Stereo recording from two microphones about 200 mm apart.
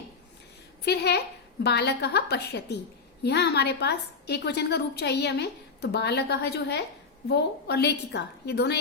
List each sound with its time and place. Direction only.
0.9 s a woman's voice: 55° left (ahead or behind)